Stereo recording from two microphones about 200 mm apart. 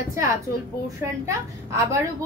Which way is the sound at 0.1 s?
15° right (ahead or behind).